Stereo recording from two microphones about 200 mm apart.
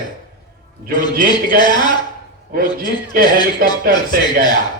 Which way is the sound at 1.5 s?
20° left (ahead or behind).